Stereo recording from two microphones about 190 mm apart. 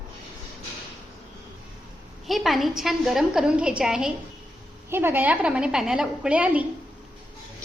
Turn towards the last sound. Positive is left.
turn(degrees=-5)  # may be behind; listen again after turning